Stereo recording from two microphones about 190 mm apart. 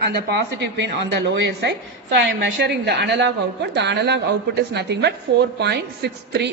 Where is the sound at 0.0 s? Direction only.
60° right (ahead or behind).